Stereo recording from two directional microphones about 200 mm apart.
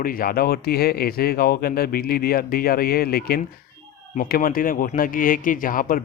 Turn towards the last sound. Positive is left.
turn(degrees=45)  # may be behind; listen again after turning